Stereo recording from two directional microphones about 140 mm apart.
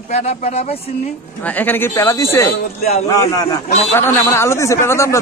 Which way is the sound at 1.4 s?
15° left (ahead or behind).